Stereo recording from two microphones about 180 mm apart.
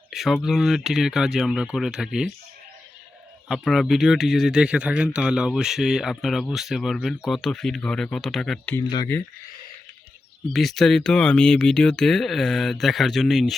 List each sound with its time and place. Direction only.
0.1 s speech: centre (ahead or behind)
3.5 s speech: centre (ahead or behind)
10.5 s speech: centre (ahead or behind)